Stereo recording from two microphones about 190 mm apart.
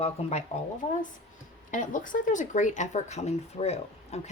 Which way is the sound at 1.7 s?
45° left (ahead or behind).